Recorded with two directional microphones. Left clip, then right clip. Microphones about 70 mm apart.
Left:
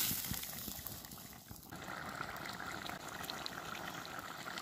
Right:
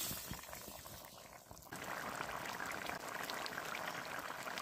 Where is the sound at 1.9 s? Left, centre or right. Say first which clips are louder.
Even; right.